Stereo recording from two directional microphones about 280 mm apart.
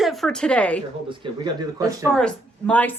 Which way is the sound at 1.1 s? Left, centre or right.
Centre.